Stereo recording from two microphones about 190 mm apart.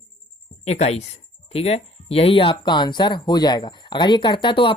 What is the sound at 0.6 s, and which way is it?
Speech, 35° left (ahead or behind).